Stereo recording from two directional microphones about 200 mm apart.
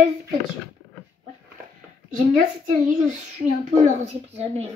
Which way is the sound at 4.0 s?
30° right (ahead or behind).